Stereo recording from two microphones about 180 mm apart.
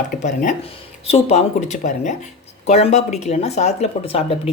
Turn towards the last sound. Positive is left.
turn(degrees=30)  # may be behind; listen again after turning